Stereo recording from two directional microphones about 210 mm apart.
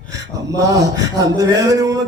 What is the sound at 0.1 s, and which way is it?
Speech, 15° right (ahead or behind).